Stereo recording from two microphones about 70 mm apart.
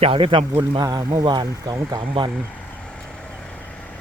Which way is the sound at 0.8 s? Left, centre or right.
Right.